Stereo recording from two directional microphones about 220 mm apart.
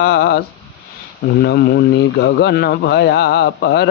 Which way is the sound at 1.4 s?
45° left (ahead or behind).